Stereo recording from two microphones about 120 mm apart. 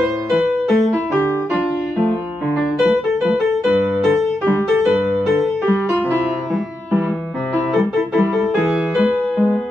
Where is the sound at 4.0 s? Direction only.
5° left (ahead or behind).